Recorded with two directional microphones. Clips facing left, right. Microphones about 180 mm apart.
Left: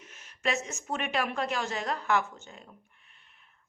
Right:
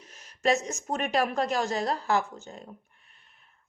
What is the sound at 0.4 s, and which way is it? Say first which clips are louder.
A woman's voice: right 6 dB; 40° right (ahead or behind).